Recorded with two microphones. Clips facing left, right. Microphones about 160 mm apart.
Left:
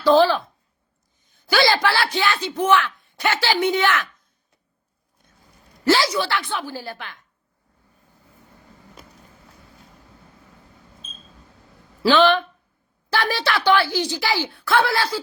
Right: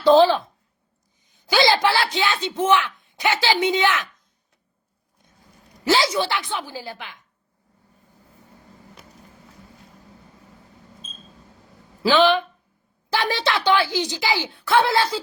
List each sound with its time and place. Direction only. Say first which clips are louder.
0.0 s speech: right 1 dB; 20° right (ahead or behind)
5.8 s speech: left 1 dB; 20° right (ahead or behind)
12.0 s speech: left 1 dB; 15° right (ahead or behind)